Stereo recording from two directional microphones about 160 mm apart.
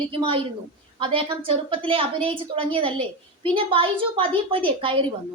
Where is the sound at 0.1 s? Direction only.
35° right (ahead or behind).